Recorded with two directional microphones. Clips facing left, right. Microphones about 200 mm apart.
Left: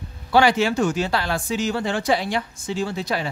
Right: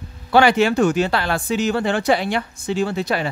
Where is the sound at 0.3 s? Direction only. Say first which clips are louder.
Right 3 dB; 60° right (ahead or behind).